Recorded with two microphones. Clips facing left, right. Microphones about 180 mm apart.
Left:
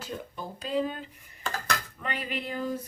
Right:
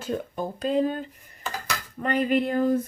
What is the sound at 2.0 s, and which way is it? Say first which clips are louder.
Speech: right 11 dB; 45° right (ahead or behind).